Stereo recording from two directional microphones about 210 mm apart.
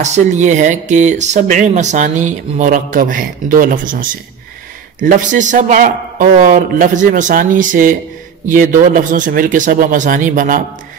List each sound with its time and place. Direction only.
0.0 s speech: 35° right (ahead or behind)